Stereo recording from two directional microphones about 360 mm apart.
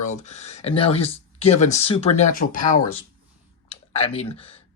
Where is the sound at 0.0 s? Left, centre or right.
Centre.